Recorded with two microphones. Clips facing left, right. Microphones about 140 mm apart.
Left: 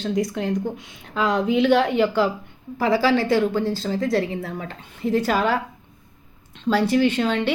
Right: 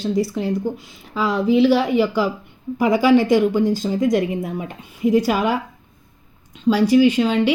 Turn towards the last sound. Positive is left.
turn(degrees=-5)  # may be behind; listen again after turning